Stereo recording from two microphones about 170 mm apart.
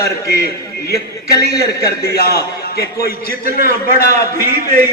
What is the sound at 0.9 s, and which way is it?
A man's voice, 70° left (ahead or behind).